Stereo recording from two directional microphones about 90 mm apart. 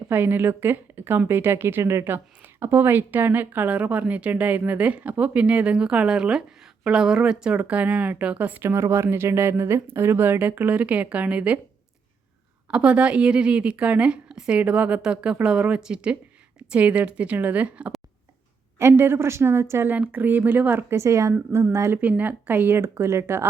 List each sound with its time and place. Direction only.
0.1 s a woman's voice: 20° right (ahead or behind)
12.7 s speech: 10° right (ahead or behind)
18.8 s speech: 30° right (ahead or behind)
22.2 s speech: 20° right (ahead or behind)